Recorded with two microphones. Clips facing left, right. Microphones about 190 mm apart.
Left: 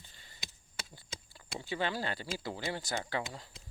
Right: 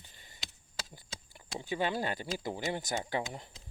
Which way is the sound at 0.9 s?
20° right (ahead or behind).